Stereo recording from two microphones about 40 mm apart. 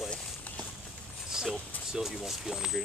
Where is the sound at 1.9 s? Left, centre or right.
Centre.